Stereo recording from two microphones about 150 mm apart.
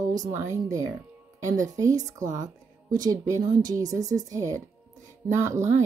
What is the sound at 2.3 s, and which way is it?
Music, 25° right (ahead or behind).